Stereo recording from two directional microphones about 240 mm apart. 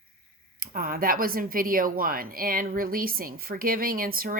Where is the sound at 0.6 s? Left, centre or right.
Right.